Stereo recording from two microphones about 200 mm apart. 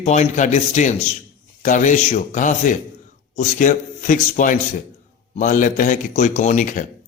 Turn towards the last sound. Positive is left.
turn(degrees=40)  # may be behind; listen again after turning